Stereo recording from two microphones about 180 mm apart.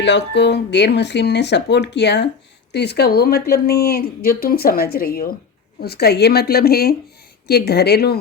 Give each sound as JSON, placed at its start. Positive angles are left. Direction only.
{"t": 0.0, "sound": "speech", "side_deg": 75}